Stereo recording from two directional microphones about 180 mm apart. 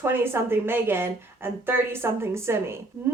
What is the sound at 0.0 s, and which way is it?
Speech, 15° right (ahead or behind).